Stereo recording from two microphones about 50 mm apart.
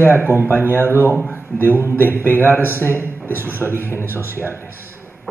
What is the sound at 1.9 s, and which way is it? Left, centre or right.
A man's voice, left.